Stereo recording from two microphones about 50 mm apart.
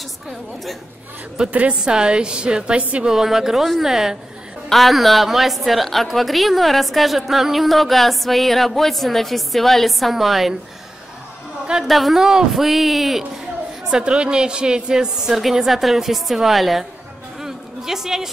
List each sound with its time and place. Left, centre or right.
1.5 s a woman's voice: right
1.8 s a woman's voice: centre
3.1 s a woman's voice: centre
4.6 s a woman's voice: centre
11.9 s a woman's voice: centre
13.8 s a woman's voice: centre
17.4 s a sound: centre